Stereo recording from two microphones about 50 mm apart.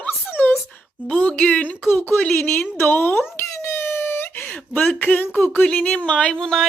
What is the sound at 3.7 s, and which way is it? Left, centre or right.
Wail, left.